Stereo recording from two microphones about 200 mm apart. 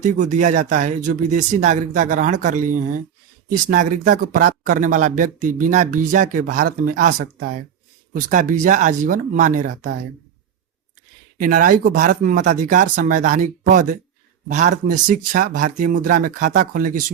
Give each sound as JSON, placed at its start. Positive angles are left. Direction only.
{"t": 0.0, "sound": "speech", "side_deg": -40}
{"t": 11.3, "sound": "speech", "side_deg": -45}